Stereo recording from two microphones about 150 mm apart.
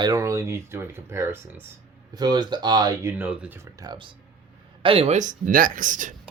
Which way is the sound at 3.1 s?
10° right (ahead or behind).